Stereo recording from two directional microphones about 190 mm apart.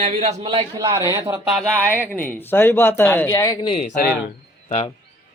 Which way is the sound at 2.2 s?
10° left (ahead or behind).